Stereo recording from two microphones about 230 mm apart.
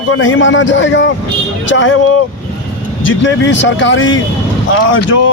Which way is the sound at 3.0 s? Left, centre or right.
Left.